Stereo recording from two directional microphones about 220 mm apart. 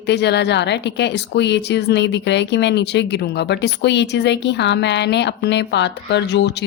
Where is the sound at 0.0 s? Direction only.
50° left (ahead or behind).